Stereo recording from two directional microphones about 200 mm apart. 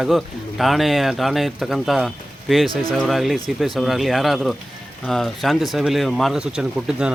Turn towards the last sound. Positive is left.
turn(degrees=-5)  # may be behind; listen again after turning